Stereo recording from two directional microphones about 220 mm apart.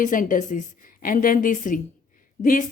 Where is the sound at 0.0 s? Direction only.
35° left (ahead or behind).